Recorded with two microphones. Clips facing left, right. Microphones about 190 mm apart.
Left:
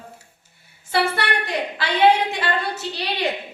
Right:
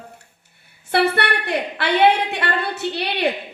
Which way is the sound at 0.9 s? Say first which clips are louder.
Right 3 dB; 60° right (ahead or behind).